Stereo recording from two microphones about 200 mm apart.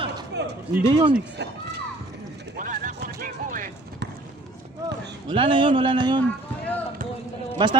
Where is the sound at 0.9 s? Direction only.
25° right (ahead or behind).